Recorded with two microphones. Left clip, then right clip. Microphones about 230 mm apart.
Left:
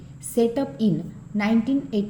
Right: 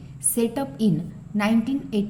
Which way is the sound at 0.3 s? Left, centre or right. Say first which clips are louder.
Left 3 dB; right.